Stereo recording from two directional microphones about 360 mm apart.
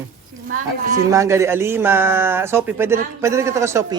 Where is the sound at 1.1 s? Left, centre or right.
Centre.